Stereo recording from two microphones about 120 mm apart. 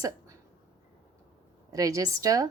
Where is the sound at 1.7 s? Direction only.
30° right (ahead or behind).